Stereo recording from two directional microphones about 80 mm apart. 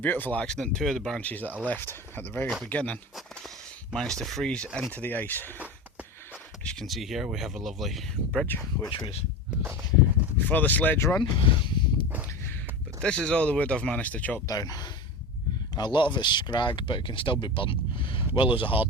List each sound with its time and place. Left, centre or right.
0.0 s speech: left
0.4 s speech: centre
1.2 s speech: left
6.7 s speech: centre
10.3 s speech: left
11.2 s a sound: left
13.0 s speech: centre
14.4 s speech: left
15.7 s speech: left